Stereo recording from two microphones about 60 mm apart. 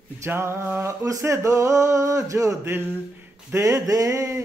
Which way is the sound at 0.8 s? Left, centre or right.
Right.